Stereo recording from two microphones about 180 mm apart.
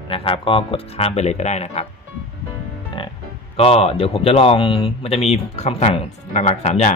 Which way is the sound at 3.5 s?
35° left (ahead or behind).